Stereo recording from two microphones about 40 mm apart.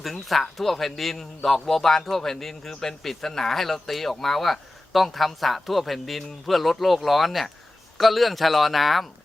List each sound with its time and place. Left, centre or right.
0.0 s a man's voice: centre